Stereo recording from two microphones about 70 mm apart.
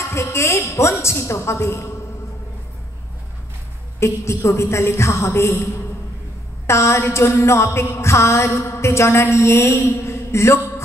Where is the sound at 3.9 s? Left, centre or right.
Left.